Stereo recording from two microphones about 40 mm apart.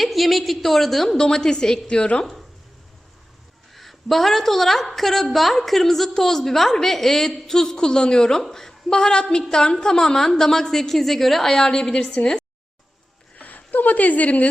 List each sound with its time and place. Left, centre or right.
0.0 s a woman's voice: centre
1.1 s a woman's voice: centre
3.8 s a woman's voice: centre
11.5 s a woman's voice: centre
13.3 s a sound: left